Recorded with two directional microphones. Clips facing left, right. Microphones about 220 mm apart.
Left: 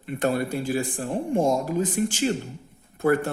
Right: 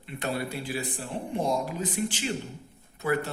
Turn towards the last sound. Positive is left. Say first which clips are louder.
# left 6 dB
turn(degrees=50)  # may be behind; listen again after turning